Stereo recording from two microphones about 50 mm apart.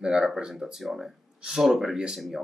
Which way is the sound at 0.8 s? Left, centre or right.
Centre.